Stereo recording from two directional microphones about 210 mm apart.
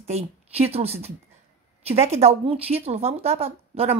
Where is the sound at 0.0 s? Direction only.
30° right (ahead or behind).